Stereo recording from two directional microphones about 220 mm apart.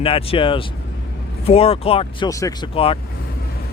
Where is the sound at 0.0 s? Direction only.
25° left (ahead or behind).